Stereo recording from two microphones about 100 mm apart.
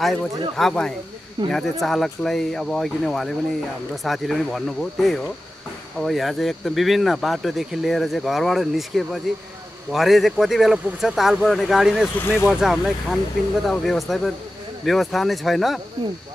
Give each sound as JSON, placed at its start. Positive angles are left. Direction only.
{"t": 0.0, "sound": "speech", "side_deg": 5}
{"t": 12.2, "sound": "speech", "side_deg": 25}
{"t": 12.4, "sound": "speech", "side_deg": -5}